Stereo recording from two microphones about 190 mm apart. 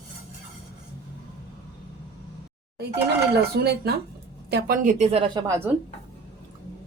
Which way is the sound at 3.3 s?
55° right (ahead or behind).